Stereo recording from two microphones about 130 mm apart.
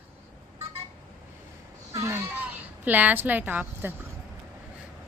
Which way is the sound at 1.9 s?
20° right (ahead or behind).